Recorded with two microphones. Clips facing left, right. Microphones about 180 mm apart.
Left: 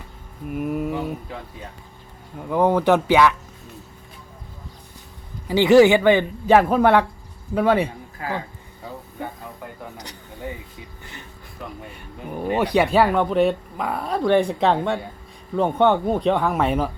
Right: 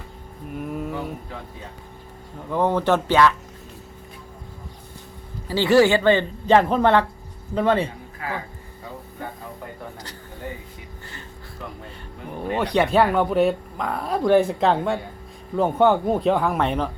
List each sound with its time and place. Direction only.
0.5 s speech: 5° left (ahead or behind)
2.5 s speech: 10° left (ahead or behind)
5.5 s speech: 15° left (ahead or behind)
11.0 s music: 15° left (ahead or behind)
12.3 s speech: 10° left (ahead or behind)